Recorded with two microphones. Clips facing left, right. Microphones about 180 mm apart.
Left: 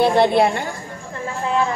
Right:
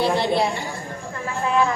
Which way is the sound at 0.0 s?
55° left (ahead or behind).